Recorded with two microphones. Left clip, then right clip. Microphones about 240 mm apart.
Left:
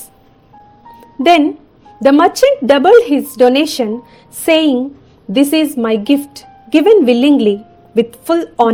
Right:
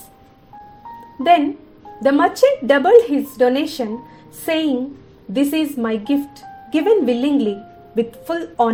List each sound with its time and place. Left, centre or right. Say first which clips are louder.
1.2 s a woman's voice: left 4 dB; left